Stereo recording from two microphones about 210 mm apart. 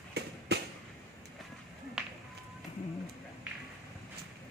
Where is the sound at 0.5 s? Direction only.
50° right (ahead or behind).